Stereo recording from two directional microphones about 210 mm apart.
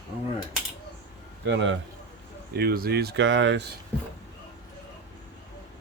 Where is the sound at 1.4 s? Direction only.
60° right (ahead or behind).